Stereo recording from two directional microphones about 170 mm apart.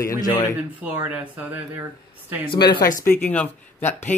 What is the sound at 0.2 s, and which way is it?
Speech, 20° left (ahead or behind).